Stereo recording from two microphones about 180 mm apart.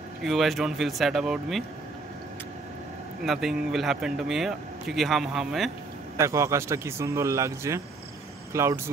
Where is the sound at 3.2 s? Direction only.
Centre (ahead or behind).